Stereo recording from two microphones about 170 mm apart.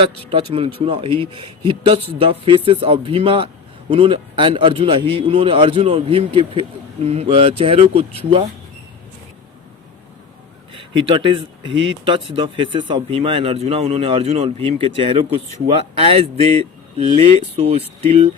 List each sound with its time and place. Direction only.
0.3 s a man's voice: 35° right (ahead or behind)
10.8 s a man's voice: 30° right (ahead or behind)